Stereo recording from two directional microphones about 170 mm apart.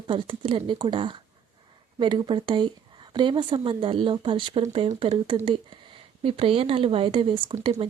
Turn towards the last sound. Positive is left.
turn(degrees=-30)  # may be behind; listen again after turning